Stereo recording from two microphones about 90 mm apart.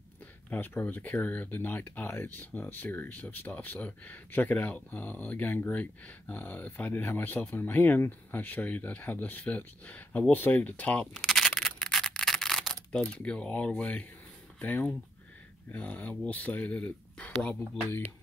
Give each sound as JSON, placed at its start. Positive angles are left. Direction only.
{"t": 0.5, "sound": "speech", "side_deg": 20}
{"t": 11.2, "sound": "camera", "side_deg": 0}
{"t": 14.6, "sound": "speech", "side_deg": 15}